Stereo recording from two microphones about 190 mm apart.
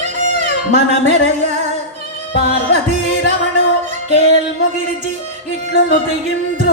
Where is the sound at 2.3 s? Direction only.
70° left (ahead or behind).